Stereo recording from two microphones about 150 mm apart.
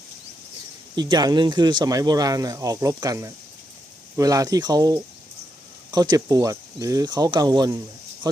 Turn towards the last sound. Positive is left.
turn(degrees=-25)  # may be behind; listen again after turning